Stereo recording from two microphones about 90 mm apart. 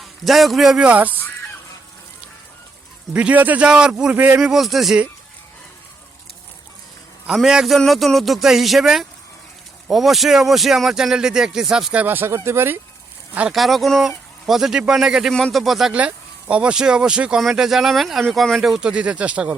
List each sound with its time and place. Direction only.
0.0 s a man's voice: centre (ahead or behind)
0.9 s speech: 15° right (ahead or behind)
3.1 s speech: 15° right (ahead or behind)
4.4 s speech: 5° right (ahead or behind)
7.3 s speech: 5° right (ahead or behind)
12.0 s speech: 25° right (ahead or behind)
13.5 s speech: centre (ahead or behind)
16.0 s speech: 15° right (ahead or behind)